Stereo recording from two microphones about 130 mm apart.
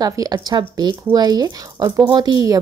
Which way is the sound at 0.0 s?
30° right (ahead or behind).